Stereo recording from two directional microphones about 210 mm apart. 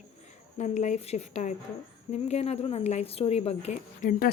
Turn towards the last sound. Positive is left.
turn(degrees=40)  # may be behind; listen again after turning